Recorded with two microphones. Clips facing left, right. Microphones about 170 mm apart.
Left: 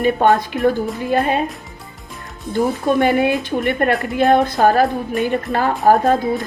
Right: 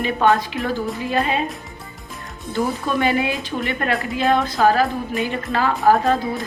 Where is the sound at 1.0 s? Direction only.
50° left (ahead or behind).